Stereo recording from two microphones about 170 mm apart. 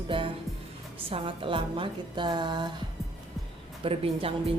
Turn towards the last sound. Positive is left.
turn(degrees=-35)  # may be behind; listen again after turning